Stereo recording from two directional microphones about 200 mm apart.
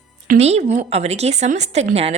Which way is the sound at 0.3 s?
35° right (ahead or behind).